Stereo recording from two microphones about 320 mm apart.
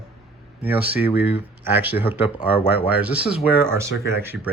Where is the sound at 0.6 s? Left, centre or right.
Centre.